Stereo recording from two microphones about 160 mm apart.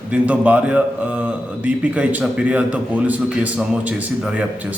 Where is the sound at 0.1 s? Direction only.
10° right (ahead or behind).